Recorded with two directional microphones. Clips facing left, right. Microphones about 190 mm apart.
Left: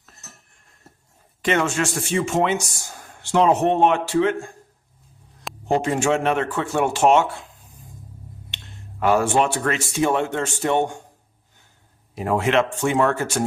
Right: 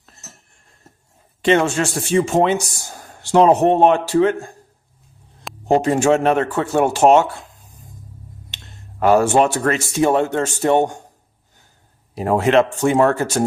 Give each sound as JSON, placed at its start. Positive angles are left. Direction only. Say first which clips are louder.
{"t": 1.4, "sound": "a man's voice", "louder": "right 5 dB", "side_deg": -30}
{"t": 5.6, "sound": "a man's voice", "louder": "right 5 dB", "side_deg": -40}
{"t": 8.4, "sound": "speech", "louder": "even", "side_deg": -40}
{"t": 12.1, "sound": "a man's voice", "louder": "right 5 dB", "side_deg": -40}